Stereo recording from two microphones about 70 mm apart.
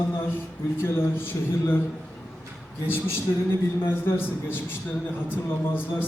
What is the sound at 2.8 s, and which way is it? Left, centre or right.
Speech, left.